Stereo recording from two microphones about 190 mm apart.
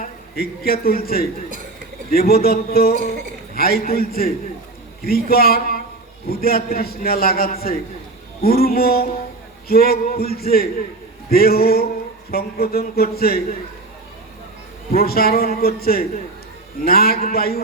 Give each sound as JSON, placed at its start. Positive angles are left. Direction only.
{"t": 0.0, "sound": "a man's voice", "side_deg": 50}
{"t": 14.9, "sound": "a man's voice", "side_deg": 50}